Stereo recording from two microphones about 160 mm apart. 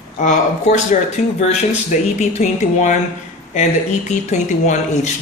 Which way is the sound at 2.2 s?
45° left (ahead or behind).